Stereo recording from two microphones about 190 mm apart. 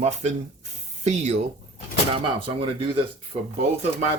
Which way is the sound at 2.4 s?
30° right (ahead or behind).